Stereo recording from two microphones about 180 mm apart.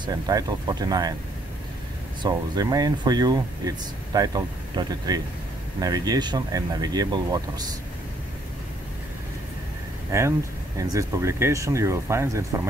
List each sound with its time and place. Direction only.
0.0 s speech: 20° right (ahead or behind)
2.2 s speech: 20° right (ahead or behind)
10.1 s speech: 15° right (ahead or behind)